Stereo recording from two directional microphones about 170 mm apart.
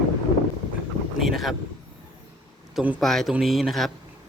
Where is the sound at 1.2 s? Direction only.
Centre (ahead or behind).